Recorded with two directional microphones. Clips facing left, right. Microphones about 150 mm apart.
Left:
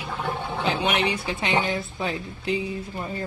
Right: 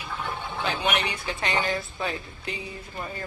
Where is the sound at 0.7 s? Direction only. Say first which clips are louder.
Left 3 dB; 25° left (ahead or behind).